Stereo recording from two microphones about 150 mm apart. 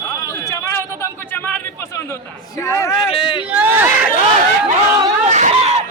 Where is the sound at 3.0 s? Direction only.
35° left (ahead or behind).